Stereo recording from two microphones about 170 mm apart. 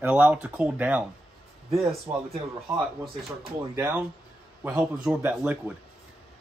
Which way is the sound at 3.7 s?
15° right (ahead or behind).